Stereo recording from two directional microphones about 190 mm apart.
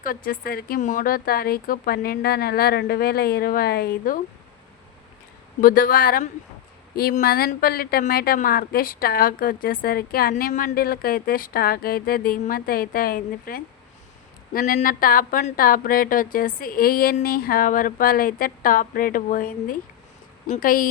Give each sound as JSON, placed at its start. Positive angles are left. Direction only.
{"t": 0.0, "sound": "speech", "side_deg": 50}
{"t": 5.5, "sound": "speech", "side_deg": 45}